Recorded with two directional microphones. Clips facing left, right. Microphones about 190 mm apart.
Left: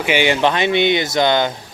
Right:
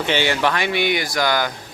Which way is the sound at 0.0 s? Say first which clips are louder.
Left 4 dB; 15° left (ahead or behind).